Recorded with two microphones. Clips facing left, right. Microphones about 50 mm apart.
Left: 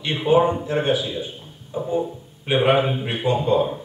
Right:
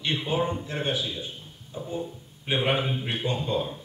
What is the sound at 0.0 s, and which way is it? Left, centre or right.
A man's voice, left.